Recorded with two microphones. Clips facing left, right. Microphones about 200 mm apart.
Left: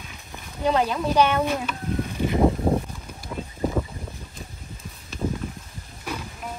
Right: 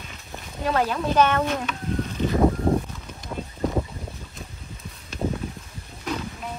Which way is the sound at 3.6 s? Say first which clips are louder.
Even; 5° left (ahead or behind).